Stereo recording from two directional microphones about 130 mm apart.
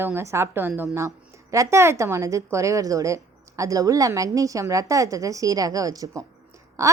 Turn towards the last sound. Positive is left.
turn(degrees=-25)  # may be behind; listen again after turning